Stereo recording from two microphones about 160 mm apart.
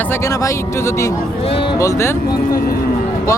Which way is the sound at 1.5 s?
35° left (ahead or behind).